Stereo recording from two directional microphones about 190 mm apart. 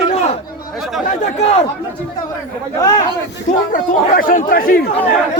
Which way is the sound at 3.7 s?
45° left (ahead or behind).